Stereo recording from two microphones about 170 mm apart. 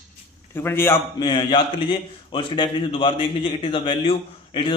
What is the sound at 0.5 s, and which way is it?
Speech, 15° left (ahead or behind).